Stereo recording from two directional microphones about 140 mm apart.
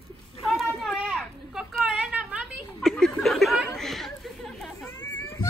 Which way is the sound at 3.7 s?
Centre (ahead or behind).